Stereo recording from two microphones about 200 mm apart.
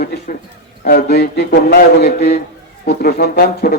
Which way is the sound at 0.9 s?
55° left (ahead or behind).